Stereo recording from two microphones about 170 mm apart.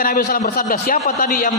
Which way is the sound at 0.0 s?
60° left (ahead or behind).